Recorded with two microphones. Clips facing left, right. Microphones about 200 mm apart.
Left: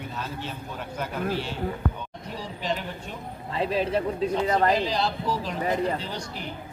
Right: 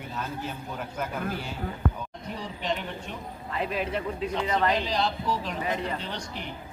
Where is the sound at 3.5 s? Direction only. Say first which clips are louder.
Left 4 dB; 30° left (ahead or behind).